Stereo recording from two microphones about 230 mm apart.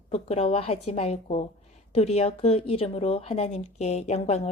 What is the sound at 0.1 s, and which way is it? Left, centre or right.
Speech, left.